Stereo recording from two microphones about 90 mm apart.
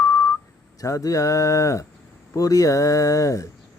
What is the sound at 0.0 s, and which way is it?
Whistling, 30° left (ahead or behind).